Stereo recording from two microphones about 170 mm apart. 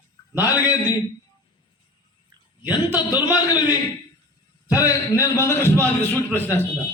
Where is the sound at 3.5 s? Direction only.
25° left (ahead or behind).